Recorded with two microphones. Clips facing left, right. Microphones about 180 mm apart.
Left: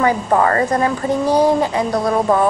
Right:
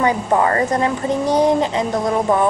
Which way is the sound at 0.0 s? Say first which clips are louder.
Left 1 dB; 20° right (ahead or behind).